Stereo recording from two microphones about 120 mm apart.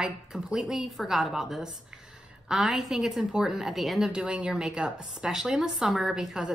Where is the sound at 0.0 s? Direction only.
5° right (ahead or behind).